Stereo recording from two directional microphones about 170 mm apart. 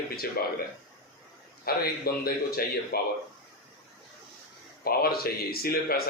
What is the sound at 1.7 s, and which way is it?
Speech, 65° left (ahead or behind).